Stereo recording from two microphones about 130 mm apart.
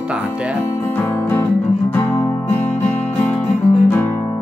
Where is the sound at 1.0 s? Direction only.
15° left (ahead or behind).